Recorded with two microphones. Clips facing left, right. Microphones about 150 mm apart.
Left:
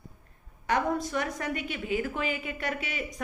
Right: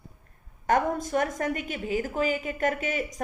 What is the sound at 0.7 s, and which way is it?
A woman's voice, 45° right (ahead or behind).